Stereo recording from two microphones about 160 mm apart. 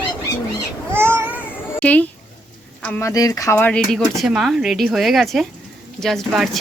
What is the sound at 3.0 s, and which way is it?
Speech, 20° left (ahead or behind).